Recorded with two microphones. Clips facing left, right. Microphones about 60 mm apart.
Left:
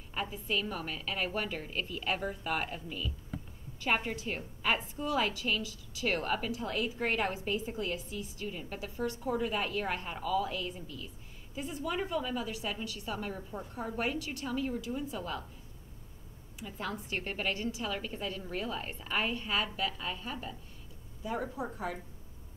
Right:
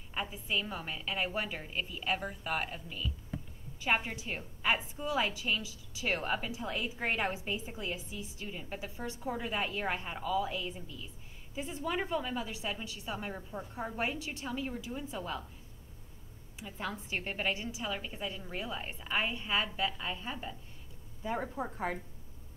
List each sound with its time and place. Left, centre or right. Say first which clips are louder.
0.1 s a woman's voice: left 1 dB; centre
16.5 s a woman's voice: left 1 dB; centre
21.2 s a woman's voice: even; right